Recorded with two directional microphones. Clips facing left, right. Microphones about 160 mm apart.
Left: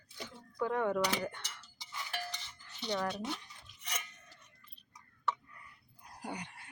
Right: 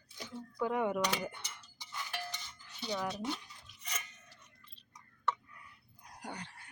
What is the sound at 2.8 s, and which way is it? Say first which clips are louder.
Speech: left 2 dB; 5° right (ahead or behind).